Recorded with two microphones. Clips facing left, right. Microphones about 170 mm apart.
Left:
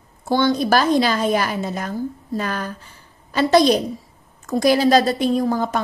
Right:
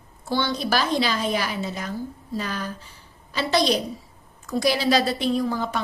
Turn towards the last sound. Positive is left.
turn(degrees=45)  # may be behind; listen again after turning